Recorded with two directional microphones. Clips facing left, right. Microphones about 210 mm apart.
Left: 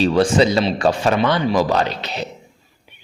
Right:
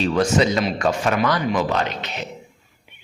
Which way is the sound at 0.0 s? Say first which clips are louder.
Left 3 dB; 35° left (ahead or behind).